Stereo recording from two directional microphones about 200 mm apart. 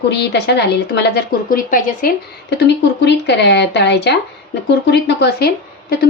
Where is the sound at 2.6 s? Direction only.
60° left (ahead or behind).